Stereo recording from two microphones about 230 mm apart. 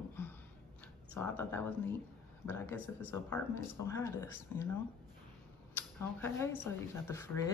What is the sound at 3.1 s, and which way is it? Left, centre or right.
Speech, centre.